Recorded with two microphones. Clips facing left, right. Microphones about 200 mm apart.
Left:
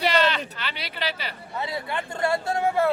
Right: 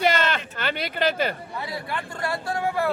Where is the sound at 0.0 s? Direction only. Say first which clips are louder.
Even; 50° right (ahead or behind).